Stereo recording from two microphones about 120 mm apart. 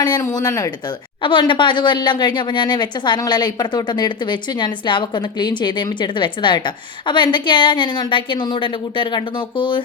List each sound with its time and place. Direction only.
0.2 s speech: 25° left (ahead or behind)
1.2 s a woman's voice: 45° left (ahead or behind)